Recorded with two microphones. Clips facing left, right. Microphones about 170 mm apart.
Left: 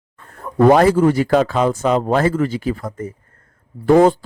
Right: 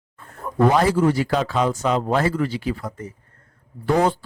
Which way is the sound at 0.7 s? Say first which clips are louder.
Left 7 dB; 55° left (ahead or behind).